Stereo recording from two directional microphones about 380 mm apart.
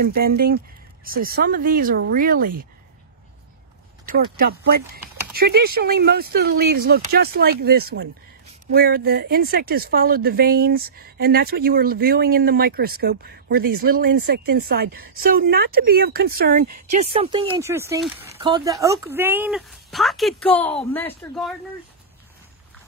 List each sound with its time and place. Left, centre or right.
0.0 s speech: right
4.1 s speech: right; by 21.5 s centre